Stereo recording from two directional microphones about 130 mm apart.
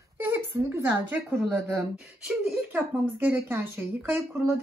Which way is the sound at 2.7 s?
15° right (ahead or behind).